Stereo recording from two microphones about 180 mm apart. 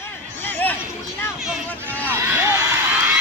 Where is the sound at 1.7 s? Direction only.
10° left (ahead or behind).